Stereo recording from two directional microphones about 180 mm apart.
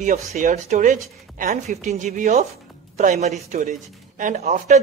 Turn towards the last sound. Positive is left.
turn(degrees=-40)  # may be behind; listen again after turning